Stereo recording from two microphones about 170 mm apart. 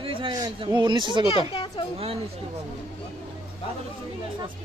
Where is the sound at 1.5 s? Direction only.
30° left (ahead or behind).